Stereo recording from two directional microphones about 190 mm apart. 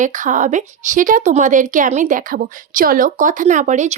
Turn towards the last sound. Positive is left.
turn(degrees=-40)  # may be behind; listen again after turning